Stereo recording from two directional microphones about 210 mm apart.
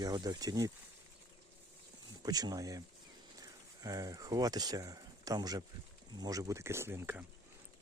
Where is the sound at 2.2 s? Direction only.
20° right (ahead or behind).